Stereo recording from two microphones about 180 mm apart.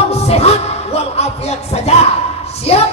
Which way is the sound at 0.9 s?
35° left (ahead or behind).